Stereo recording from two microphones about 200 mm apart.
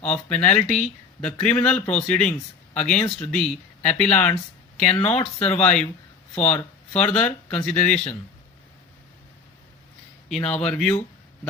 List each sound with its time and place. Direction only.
0.0 s speech: 5° left (ahead or behind)
5.0 s speech: 30° left (ahead or behind)
5.6 s speech: 5° left (ahead or behind)
10.2 s speech: 5° left (ahead or behind)